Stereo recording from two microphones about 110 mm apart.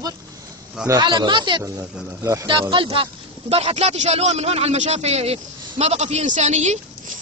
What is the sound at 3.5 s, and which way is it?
A man's voice, 75° right (ahead or behind).